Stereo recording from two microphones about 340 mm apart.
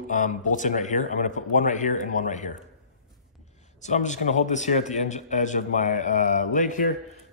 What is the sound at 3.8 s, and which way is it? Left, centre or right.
A man's voice, left.